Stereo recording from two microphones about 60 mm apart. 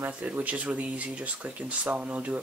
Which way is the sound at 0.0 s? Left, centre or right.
Right.